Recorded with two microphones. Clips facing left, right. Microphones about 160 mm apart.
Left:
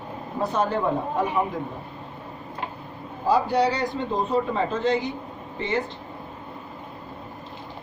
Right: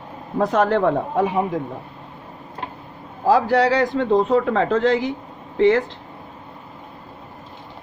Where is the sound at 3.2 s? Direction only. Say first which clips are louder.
Right 4 dB; 90° right.